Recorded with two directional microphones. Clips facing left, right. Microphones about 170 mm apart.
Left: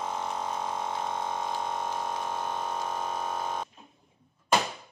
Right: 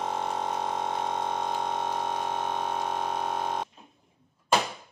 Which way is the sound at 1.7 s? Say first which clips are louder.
Right 2 dB; 70° right (ahead or behind).